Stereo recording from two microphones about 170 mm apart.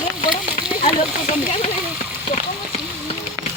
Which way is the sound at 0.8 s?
50° left (ahead or behind).